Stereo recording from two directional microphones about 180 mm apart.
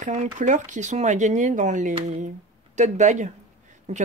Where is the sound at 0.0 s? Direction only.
40° right (ahead or behind).